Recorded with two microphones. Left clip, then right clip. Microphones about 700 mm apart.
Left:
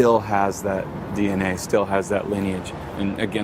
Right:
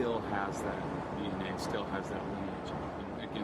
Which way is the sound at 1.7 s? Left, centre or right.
Left.